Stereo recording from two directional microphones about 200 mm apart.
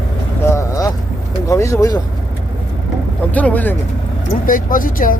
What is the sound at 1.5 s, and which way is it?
Speech, 15° left (ahead or behind).